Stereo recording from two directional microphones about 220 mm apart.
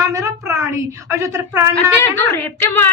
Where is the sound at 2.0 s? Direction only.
10° left (ahead or behind).